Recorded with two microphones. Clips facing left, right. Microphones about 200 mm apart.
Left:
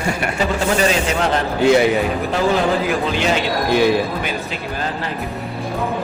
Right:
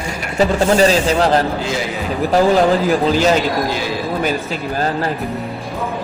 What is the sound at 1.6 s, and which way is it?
Speech, 60° left (ahead or behind).